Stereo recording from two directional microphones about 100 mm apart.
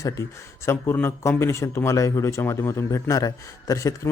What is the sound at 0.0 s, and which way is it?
Speech, 30° left (ahead or behind).